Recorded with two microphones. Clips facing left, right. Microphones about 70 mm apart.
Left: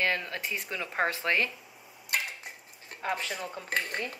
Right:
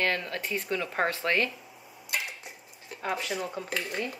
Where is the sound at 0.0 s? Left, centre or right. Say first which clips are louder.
Right 1 dB; centre.